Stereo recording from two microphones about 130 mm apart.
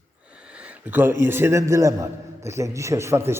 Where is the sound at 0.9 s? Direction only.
15° right (ahead or behind).